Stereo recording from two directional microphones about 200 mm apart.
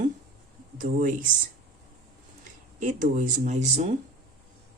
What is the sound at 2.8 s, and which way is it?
Speech, 40° right (ahead or behind).